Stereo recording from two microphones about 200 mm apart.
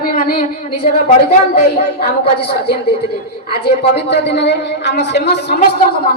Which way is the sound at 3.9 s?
55° left (ahead or behind).